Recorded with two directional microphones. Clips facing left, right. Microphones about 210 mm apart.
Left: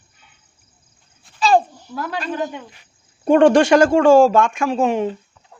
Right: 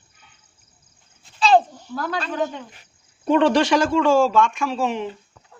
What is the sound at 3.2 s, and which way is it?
Speech, 50° left (ahead or behind).